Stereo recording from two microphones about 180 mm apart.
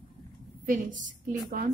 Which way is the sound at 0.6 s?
45° right (ahead or behind).